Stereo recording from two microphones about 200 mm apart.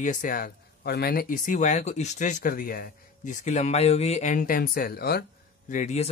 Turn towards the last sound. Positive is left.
turn(degrees=35)  # may be behind; listen again after turning